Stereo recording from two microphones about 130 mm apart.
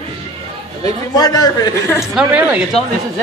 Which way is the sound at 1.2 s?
30° left (ahead or behind).